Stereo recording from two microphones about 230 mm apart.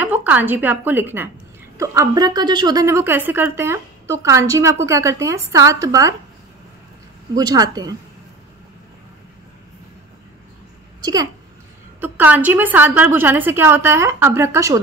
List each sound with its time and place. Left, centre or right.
0.0 s a woman's voice: centre
7.3 s a woman's voice: centre
12.0 s a woman's voice: centre